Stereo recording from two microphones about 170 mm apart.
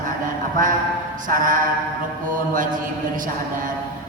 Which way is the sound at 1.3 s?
50° right (ahead or behind).